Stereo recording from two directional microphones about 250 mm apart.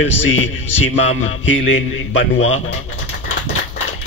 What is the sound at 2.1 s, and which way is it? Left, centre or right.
Speech, left.